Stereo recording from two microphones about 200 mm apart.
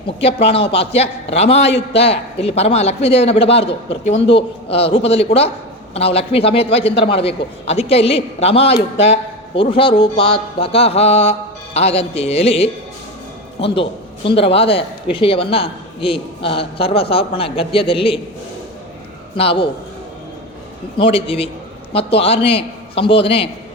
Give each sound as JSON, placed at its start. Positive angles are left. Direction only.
{"t": 0.2, "sound": "a man's voice", "side_deg": 30}
{"t": 19.4, "sound": "a man's voice", "side_deg": 25}
{"t": 21.0, "sound": "a man's voice", "side_deg": 25}